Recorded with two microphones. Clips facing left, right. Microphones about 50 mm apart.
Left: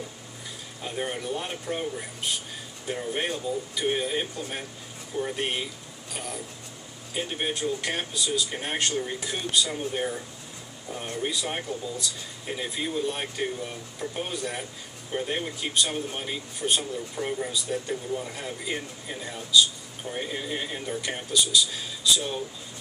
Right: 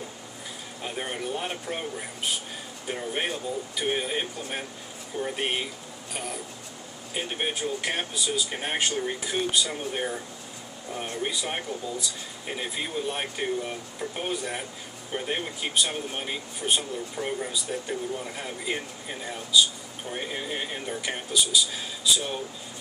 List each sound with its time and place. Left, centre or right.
0.8 s speech: centre
11.2 s speech: centre